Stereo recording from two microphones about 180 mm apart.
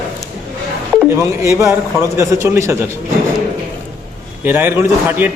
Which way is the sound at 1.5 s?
15° right (ahead or behind).